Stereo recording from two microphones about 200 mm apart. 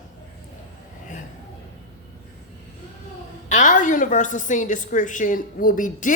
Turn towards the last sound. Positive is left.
turn(degrees=40)  # may be behind; listen again after turning